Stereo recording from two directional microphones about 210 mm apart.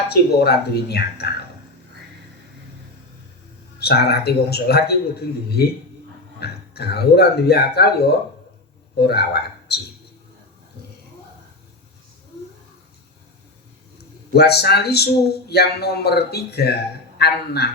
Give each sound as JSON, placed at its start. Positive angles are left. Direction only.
{"t": 0.1, "sound": "a man's voice", "side_deg": 50}
{"t": 3.8, "sound": "a man's voice", "side_deg": 50}
{"t": 14.3, "sound": "a man's voice", "side_deg": 50}